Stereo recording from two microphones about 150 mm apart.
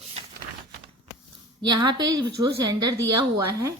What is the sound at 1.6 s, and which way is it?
A woman's voice, 30° right (ahead or behind).